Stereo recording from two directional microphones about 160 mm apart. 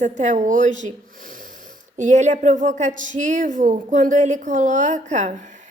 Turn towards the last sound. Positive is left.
turn(degrees=-50)  # may be behind; listen again after turning